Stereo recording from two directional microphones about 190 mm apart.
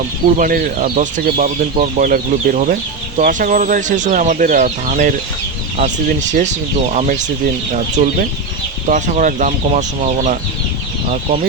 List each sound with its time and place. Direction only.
0.3 s speech: 45° right (ahead or behind)